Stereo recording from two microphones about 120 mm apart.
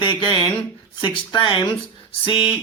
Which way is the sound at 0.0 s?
40° left (ahead or behind).